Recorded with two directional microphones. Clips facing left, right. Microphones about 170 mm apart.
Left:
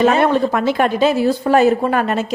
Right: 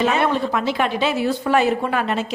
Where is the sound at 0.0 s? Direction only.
45° left (ahead or behind).